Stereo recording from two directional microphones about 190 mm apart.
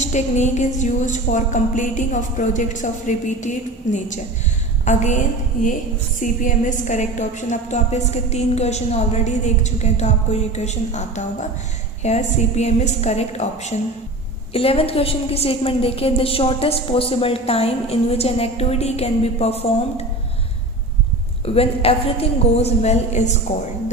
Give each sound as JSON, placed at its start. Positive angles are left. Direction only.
{"t": 0.0, "sound": "a woman's voice", "side_deg": 40}
{"t": 21.4, "sound": "a woman's voice", "side_deg": 30}